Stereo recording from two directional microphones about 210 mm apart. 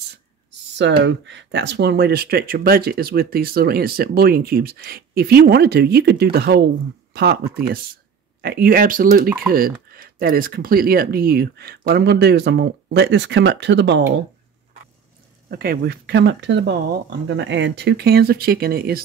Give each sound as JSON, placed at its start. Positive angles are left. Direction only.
{"t": 0.7, "sound": "speech", "side_deg": -60}
{"t": 7.6, "sound": "speech", "side_deg": -45}
{"t": 15.5, "sound": "speech", "side_deg": -45}